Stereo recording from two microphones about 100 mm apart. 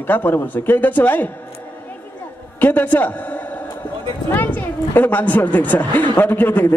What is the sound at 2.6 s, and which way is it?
A man's voice, 20° left (ahead or behind).